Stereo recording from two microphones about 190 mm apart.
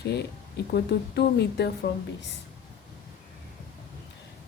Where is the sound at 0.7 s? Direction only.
60° left (ahead or behind).